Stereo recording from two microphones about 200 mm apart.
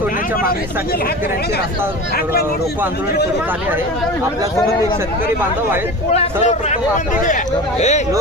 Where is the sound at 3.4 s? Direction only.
10° right (ahead or behind).